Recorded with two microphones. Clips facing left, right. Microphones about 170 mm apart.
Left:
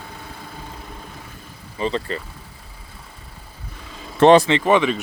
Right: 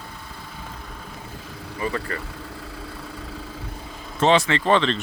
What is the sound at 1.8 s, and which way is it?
Speech, 20° left (ahead or behind).